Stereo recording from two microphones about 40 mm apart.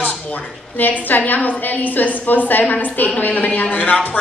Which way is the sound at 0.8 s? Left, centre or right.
Left.